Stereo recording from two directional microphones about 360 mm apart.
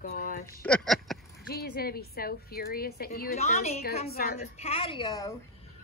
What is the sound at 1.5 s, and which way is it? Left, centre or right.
A woman's voice, left.